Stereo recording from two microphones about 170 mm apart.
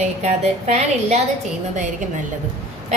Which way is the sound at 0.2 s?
40° right (ahead or behind).